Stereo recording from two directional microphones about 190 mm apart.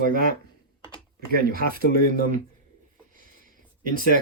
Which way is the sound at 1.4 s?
50° right (ahead or behind).